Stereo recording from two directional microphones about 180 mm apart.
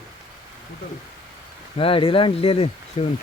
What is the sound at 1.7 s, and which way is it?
Speech, 30° left (ahead or behind).